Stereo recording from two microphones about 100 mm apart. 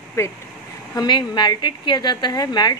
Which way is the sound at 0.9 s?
45° left (ahead or behind).